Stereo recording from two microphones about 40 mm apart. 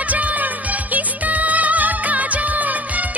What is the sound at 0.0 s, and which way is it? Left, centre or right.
Music of bollywood, right.